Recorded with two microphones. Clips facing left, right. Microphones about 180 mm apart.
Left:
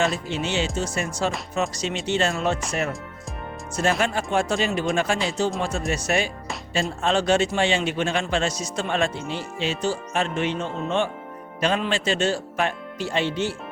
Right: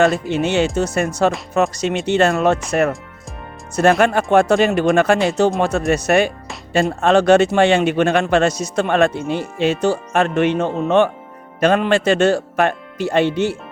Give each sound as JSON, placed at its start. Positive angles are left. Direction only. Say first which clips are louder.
{"t": 0.0, "sound": "a man's voice", "louder": "right 8 dB", "side_deg": -55}
{"t": 3.8, "sound": "a man's voice", "louder": "right 9 dB", "side_deg": -55}